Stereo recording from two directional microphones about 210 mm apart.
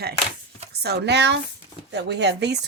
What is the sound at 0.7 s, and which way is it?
Speech, 50° right (ahead or behind).